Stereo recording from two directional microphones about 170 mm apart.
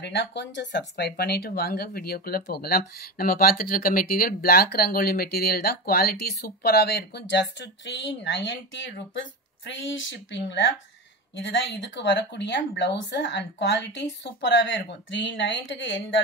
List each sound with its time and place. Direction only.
0.0 s speech: 90° left